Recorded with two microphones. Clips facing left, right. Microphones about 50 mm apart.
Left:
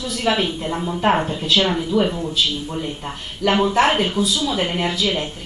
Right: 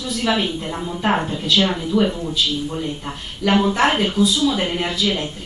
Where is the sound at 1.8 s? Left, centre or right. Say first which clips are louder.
Even; centre.